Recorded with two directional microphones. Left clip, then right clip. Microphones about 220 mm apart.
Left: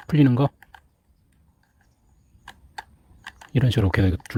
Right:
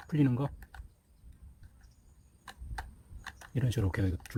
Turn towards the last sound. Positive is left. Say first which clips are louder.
# left 12 dB
turn(degrees=40)  # may be behind; listen again after turning